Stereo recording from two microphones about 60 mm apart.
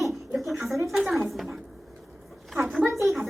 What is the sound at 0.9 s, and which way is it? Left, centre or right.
Speech, centre.